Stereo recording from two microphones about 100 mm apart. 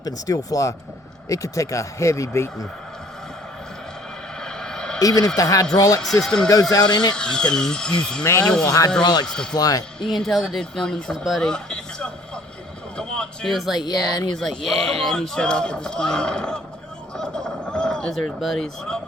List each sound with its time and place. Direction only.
0.0 s speech: 40° left (ahead or behind)
4.4 s a sound: 5° left (ahead or behind)
4.9 s speech: 35° left (ahead or behind)
6.2 s speech: 5° left (ahead or behind)
6.5 s speech: 40° left (ahead or behind)
7.2 s a man's voice: 5° left (ahead or behind)
8.6 s speech: 35° left (ahead or behind)
9.2 s a man's voice: 5° left (ahead or behind)
9.6 s speech: 40° left (ahead or behind)
10.0 s speech: 5° left (ahead or behind)
13.7 s speech: 45° left (ahead or behind)
14.3 s a man's voice: 5° left (ahead or behind)
17.2 s a sound: 5° left (ahead or behind)